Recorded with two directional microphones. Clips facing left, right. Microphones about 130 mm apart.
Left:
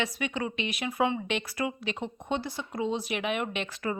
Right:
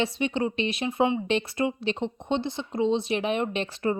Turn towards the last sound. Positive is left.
turn(degrees=-30)  # may be behind; listen again after turning